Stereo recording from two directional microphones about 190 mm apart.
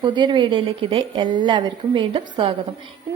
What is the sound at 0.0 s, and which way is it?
A woman's voice, 25° right (ahead or behind).